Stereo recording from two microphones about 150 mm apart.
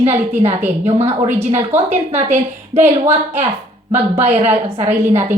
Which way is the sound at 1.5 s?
15° right (ahead or behind).